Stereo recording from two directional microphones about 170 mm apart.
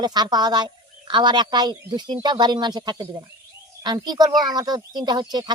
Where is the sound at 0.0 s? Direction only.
25° right (ahead or behind).